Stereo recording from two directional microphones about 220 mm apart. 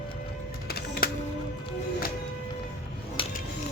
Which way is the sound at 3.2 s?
25° left (ahead or behind).